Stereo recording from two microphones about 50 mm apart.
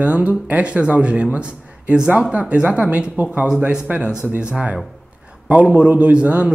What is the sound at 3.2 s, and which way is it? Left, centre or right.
Speech, right.